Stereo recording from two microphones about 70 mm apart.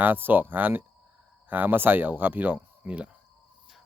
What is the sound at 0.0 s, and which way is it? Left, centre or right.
A man's voice, right.